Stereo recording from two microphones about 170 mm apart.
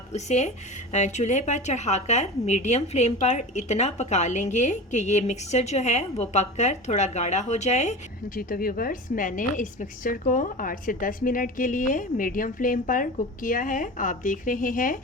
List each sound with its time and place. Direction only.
0.1 s a woman's voice: 40° left (ahead or behind)
8.4 s a woman's voice: 60° left (ahead or behind)